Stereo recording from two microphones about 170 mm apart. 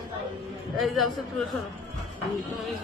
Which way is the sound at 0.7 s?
Centre (ahead or behind).